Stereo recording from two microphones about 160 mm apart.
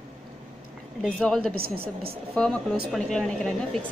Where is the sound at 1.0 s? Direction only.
5° left (ahead or behind).